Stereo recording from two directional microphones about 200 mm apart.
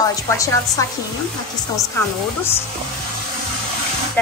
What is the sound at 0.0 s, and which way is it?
Speech, 15° left (ahead or behind).